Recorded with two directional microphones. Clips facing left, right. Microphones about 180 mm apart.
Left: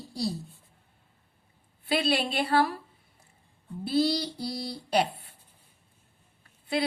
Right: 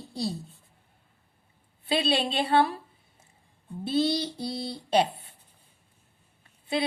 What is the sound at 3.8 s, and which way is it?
A woman's voice, 25° right (ahead or behind).